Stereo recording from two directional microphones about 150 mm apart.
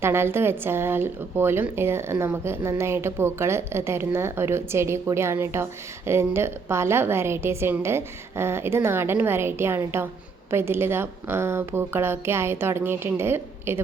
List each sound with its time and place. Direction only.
0.0 s speech: 15° right (ahead or behind)